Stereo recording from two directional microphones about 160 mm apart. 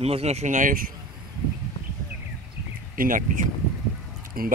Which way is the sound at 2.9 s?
60° right (ahead or behind).